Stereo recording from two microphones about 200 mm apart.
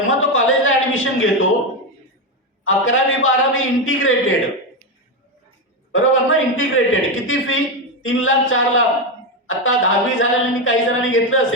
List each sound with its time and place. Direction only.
0.1 s a man's voice: 80° left
2.6 s a woman's voice: 80° left
5.9 s a woman's voice: 80° left